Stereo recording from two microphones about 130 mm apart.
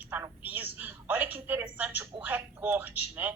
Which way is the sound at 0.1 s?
15° right (ahead or behind).